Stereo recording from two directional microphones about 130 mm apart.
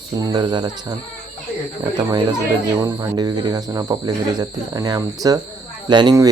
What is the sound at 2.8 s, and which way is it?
Speech, 25° right (ahead or behind).